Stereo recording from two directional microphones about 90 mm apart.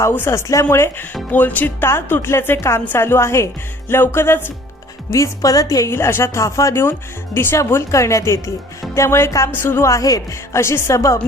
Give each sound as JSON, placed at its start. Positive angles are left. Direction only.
{"t": 0.0, "sound": "a woman's voice", "side_deg": 25}
{"t": 5.1, "sound": "speech", "side_deg": 40}
{"t": 5.9, "sound": "a woman's voice", "side_deg": 30}